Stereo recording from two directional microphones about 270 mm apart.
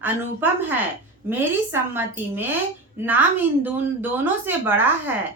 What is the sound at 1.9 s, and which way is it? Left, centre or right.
A woman's voice, centre.